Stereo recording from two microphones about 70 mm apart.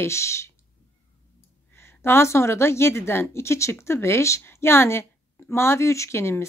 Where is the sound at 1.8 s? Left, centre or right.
Left.